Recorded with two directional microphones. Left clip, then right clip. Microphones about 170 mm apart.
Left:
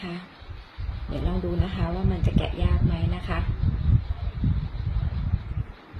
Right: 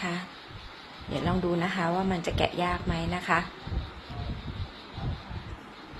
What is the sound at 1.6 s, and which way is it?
Speech, 15° left (ahead or behind).